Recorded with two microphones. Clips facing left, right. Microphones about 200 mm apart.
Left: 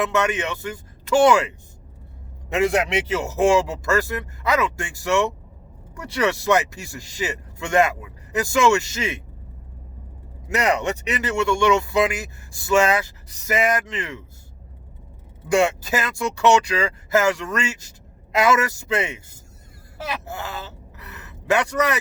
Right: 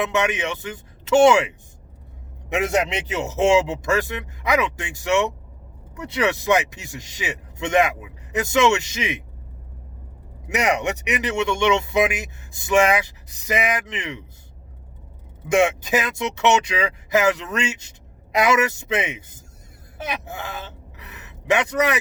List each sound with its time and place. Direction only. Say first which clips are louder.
0.0 s speech: even; 20° right (ahead or behind)
3.1 s speech: even; 20° right (ahead or behind)
10.5 s speech: even; 15° right (ahead or behind)
15.4 s speech: right 1 dB; 20° right (ahead or behind)